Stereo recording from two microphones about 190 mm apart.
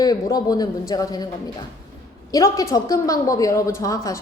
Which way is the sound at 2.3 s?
20° left (ahead or behind).